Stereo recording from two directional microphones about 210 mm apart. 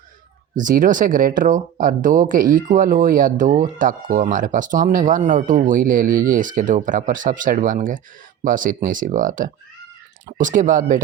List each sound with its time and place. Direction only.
0.5 s speech: 40° right (ahead or behind)